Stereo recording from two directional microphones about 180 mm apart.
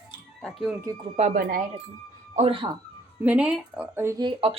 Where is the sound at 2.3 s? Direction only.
35° right (ahead or behind).